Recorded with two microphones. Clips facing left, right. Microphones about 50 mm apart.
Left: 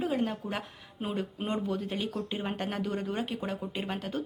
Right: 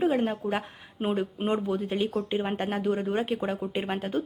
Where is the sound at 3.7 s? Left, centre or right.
Right.